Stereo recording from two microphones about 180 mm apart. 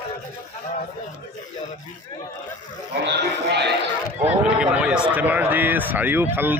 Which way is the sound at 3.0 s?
70° right (ahead or behind).